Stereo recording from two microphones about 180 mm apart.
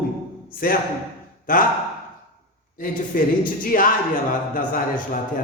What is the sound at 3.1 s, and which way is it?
Speech, 50° left (ahead or behind).